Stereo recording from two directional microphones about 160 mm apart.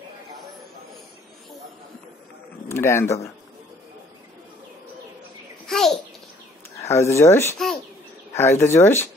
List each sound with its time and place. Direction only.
2.7 s speech: 15° left (ahead or behind)
5.7 s a sound: centre (ahead or behind)
6.8 s speech: 20° left (ahead or behind)
7.5 s bird: centre (ahead or behind)
8.4 s speech: 15° left (ahead or behind)